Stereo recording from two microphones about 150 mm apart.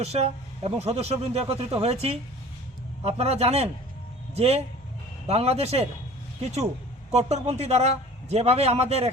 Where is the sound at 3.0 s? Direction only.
45° right (ahead or behind).